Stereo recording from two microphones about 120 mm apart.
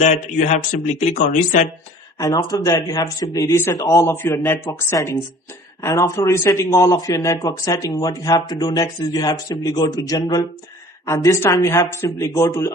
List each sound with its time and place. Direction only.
0.0 s speech: 80° left
2.1 s speech: 30° left (ahead or behind)